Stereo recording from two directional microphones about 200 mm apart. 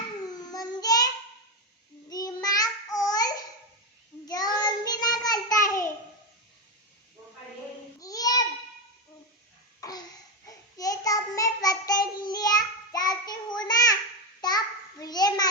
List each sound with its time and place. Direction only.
0.3 s child singing: 20° left (ahead or behind)
7.9 s babbling: 20° left (ahead or behind)
9.8 s babbling: 15° left (ahead or behind)
10.4 s child singing: 15° left (ahead or behind)
14.4 s a sound: 20° left (ahead or behind)